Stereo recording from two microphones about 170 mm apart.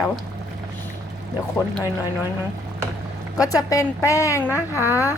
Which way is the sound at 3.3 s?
20° left (ahead or behind).